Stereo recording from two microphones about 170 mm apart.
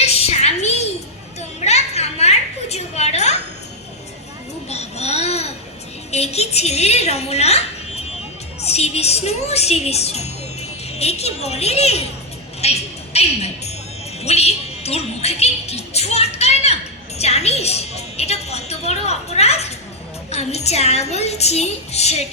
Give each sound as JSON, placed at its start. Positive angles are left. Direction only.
{"t": 0.0, "sound": "a sound", "side_deg": 35}
{"t": 4.7, "sound": "babbling", "side_deg": 40}
{"t": 6.1, "sound": "a woman's voice", "side_deg": 40}